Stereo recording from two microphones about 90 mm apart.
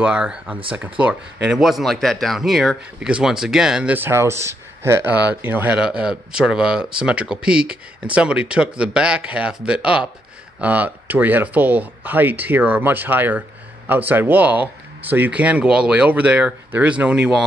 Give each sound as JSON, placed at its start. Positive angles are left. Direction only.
{"t": 0.0, "sound": "speech", "side_deg": -10}
{"t": 3.9, "sound": "speech", "side_deg": -25}
{"t": 5.1, "sound": "speech", "side_deg": -15}